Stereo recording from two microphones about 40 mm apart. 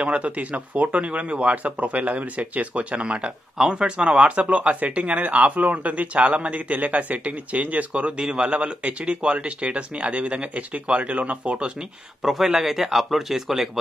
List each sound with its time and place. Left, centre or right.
0.0 s speech: right
7.9 s speech: right
12.2 s speech: centre